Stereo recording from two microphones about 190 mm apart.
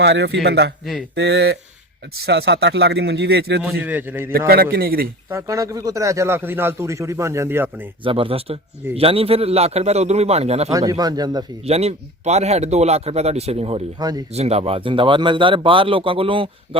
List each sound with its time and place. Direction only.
0.0 s a man's voice: 65° right (ahead or behind)
3.6 s speech: 10° right (ahead or behind)
4.3 s a man's voice: 50° right (ahead or behind)
5.3 s speech: 15° right (ahead or behind)
8.0 s speech: 30° right (ahead or behind)
10.7 s speech: 20° right (ahead or behind)
11.6 s speech: 35° right (ahead or behind)
14.0 s speech: 20° right (ahead or behind)
14.3 s speech: 35° right (ahead or behind)